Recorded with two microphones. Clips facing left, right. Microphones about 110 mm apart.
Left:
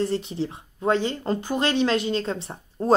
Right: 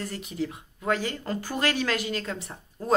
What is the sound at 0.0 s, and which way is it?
Speech, 30° left (ahead or behind).